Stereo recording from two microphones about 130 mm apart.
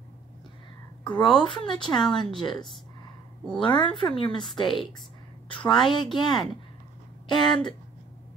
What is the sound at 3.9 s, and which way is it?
Speech, 40° left (ahead or behind).